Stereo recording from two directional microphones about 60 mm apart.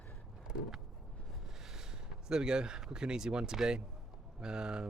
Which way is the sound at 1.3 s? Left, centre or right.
Centre.